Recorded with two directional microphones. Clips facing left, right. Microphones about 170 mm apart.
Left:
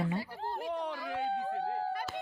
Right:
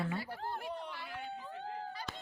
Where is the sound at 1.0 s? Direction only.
80° left.